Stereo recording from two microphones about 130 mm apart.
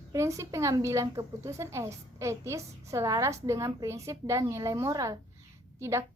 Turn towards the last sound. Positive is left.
turn(degrees=-20)  # may be behind; listen again after turning